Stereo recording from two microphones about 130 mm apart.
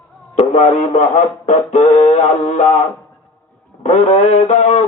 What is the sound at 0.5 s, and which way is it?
Music, 60° left (ahead or behind).